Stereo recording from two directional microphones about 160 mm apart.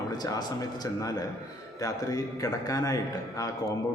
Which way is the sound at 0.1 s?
25° left (ahead or behind).